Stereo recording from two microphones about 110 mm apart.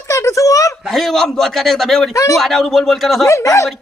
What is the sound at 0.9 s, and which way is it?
A man's voice, centre (ahead or behind).